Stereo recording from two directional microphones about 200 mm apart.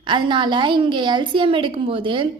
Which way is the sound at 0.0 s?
25° right (ahead or behind).